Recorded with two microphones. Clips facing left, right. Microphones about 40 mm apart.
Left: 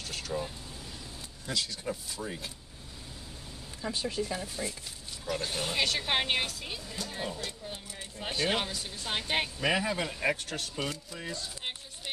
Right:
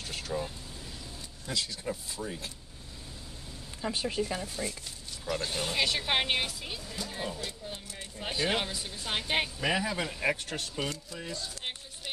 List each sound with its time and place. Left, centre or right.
0.0 s vehicle: centre
1.5 s speech: centre
3.9 s speech: right
4.3 s speech: centre
10.9 s a sound: centre